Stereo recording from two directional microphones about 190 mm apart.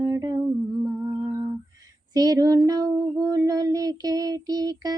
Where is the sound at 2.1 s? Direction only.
20° right (ahead or behind).